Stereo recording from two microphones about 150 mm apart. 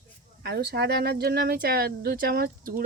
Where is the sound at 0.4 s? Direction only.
90° right.